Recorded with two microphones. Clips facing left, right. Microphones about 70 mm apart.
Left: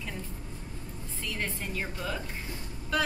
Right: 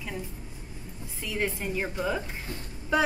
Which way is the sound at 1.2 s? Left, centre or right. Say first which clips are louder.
Right 5 dB; centre.